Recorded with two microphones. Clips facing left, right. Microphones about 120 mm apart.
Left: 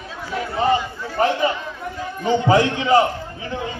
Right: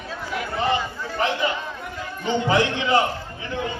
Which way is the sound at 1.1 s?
40° left (ahead or behind).